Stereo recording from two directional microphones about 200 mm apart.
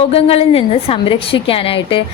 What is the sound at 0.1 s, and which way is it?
A woman's voice, 30° left (ahead or behind).